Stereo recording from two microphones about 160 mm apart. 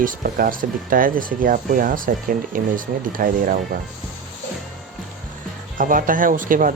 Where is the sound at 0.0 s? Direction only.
60° right (ahead or behind).